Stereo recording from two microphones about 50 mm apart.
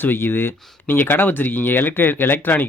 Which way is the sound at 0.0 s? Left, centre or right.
Left.